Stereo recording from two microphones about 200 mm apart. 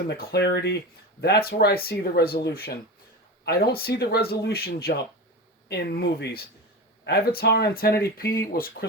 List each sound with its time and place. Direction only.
0.1 s speech: 50° left (ahead or behind)